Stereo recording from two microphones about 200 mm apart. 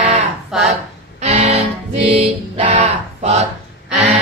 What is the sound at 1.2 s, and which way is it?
Music, 30° right (ahead or behind).